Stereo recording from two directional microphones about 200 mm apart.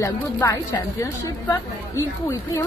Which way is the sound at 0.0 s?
15° left (ahead or behind).